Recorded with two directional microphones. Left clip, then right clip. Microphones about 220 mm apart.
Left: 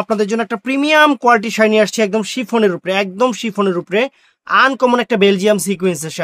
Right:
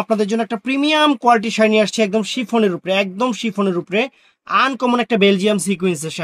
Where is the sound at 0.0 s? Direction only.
35° left (ahead or behind).